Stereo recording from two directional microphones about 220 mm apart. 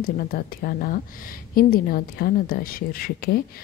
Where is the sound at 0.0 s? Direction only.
40° left (ahead or behind).